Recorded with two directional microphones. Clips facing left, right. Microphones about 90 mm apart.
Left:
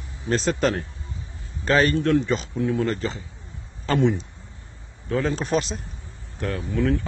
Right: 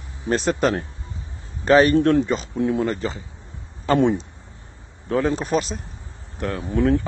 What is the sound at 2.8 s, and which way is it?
Speech, 15° right (ahead or behind).